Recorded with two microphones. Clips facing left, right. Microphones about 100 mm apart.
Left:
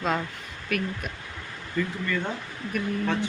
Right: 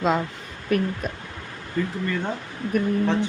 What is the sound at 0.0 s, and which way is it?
Speech, 20° right (ahead or behind).